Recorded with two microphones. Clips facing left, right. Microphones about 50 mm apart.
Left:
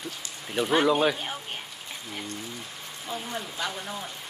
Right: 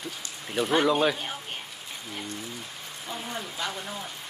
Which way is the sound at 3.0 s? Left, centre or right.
Centre.